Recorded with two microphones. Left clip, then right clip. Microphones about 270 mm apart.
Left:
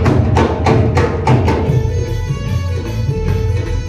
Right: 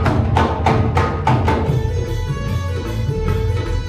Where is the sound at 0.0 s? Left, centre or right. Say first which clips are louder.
Left 3 dB; right.